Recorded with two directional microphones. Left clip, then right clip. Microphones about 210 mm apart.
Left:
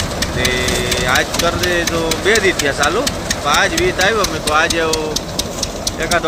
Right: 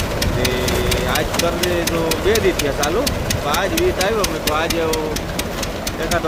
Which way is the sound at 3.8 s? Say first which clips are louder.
Left 3 dB; centre (ahead or behind).